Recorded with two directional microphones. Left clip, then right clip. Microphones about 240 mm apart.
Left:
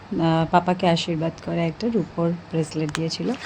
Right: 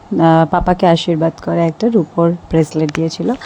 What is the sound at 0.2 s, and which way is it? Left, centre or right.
Speech, right.